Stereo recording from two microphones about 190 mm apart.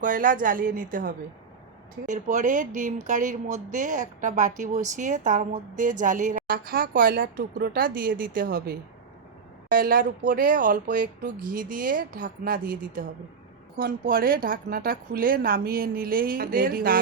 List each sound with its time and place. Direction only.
0.0 s speech: 45° right (ahead or behind)